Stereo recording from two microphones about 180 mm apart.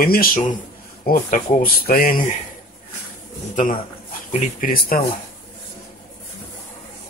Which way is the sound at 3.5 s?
50° left (ahead or behind).